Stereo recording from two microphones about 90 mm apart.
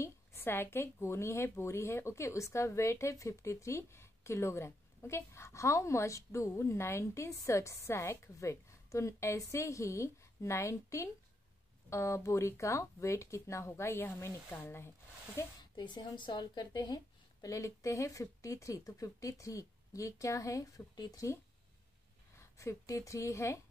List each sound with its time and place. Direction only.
0.0 s a woman's voice: 30° left (ahead or behind)
15.7 s a woman's voice: 55° left (ahead or behind)
22.6 s a woman's voice: 35° left (ahead or behind)